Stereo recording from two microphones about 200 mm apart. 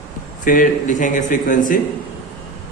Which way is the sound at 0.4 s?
40° left (ahead or behind).